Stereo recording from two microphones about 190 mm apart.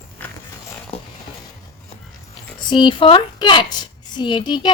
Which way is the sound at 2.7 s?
25° left (ahead or behind).